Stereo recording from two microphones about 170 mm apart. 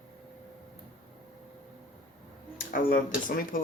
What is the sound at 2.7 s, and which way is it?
Speech, 50° left (ahead or behind).